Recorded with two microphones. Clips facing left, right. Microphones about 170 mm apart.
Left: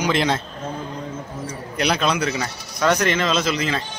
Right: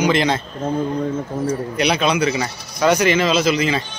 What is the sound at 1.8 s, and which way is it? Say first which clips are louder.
A man's voice: right 1 dB; centre (ahead or behind).